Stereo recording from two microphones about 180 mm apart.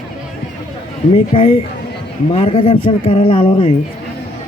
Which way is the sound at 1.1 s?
35° left (ahead or behind).